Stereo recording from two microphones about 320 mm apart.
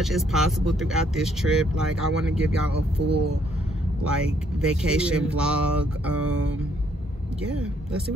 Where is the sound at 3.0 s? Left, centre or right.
Right.